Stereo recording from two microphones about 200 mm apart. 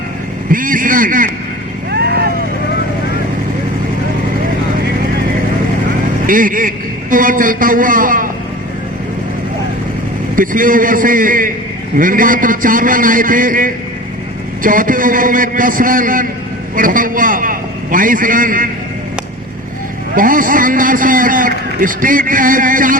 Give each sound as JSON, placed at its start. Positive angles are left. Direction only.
{"t": 0.5, "sound": "a man's voice", "side_deg": -45}
{"t": 1.9, "sound": "vehicle", "side_deg": -50}
{"t": 6.2, "sound": "a man's voice", "side_deg": -45}
{"t": 10.3, "sound": "a man's voice", "side_deg": -45}
{"t": 20.1, "sound": "a man's voice", "side_deg": -45}